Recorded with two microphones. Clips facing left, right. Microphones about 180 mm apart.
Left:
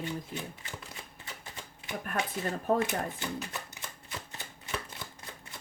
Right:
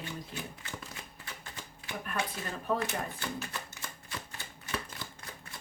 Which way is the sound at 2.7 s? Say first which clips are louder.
Left 4 dB; 45° left (ahead or behind).